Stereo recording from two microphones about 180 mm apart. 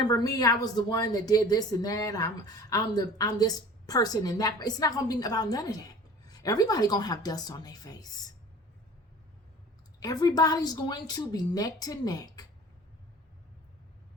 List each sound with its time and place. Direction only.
0.0 s speech: 20° left (ahead or behind)
10.0 s speech: 20° left (ahead or behind)